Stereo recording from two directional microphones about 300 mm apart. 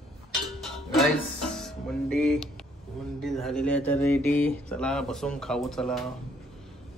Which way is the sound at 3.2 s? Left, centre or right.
Centre.